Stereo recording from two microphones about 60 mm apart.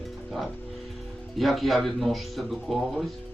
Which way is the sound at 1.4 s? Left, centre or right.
Centre.